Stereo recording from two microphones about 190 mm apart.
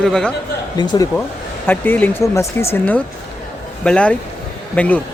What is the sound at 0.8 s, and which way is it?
Speech, 20° left (ahead or behind).